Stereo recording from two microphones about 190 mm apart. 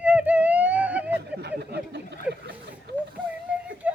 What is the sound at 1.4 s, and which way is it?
Speech, 60° right (ahead or behind).